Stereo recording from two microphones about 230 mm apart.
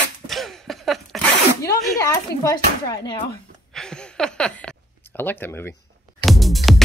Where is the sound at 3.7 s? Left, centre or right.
Centre.